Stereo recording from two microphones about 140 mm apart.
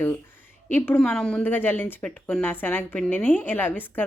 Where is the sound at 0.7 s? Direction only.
10° left (ahead or behind).